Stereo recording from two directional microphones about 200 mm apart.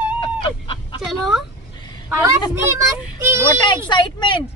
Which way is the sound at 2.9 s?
15° right (ahead or behind).